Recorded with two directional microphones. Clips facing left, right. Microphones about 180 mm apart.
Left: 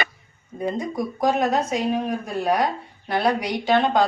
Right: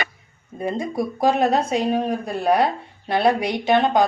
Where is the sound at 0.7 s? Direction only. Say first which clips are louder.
Right 2 dB; 30° right (ahead or behind).